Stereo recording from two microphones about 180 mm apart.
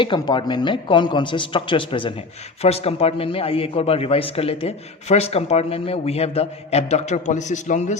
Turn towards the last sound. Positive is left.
turn(degrees=40)  # may be behind; listen again after turning